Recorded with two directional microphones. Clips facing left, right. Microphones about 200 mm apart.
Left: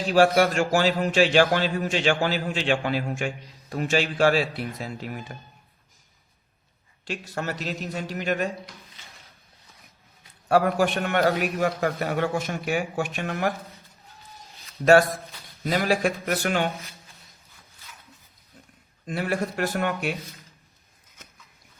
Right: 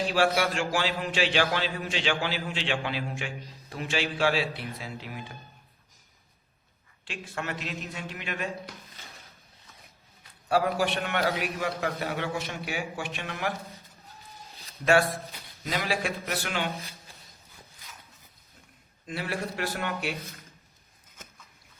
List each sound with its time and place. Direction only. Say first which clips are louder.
0.1 s a man's voice: left 10 dB; 45° left (ahead or behind)
7.0 s speech: left 5 dB; 40° left (ahead or behind)
10.5 s a man's voice: left 5 dB; 50° left (ahead or behind)
15.6 s a man's voice: left 7 dB; 45° left (ahead or behind)
19.0 s a man's voice: left 6 dB; 45° left (ahead or behind)